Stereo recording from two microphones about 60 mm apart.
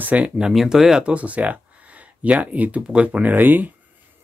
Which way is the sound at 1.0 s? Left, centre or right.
Right.